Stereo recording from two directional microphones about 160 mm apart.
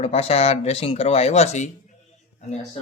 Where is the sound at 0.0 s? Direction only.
40° left (ahead or behind).